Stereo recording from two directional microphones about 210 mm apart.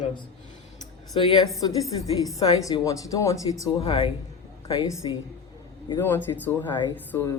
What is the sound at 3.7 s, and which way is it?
Speech, 25° left (ahead or behind).